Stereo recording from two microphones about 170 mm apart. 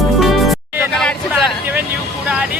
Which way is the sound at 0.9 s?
5° left (ahead or behind).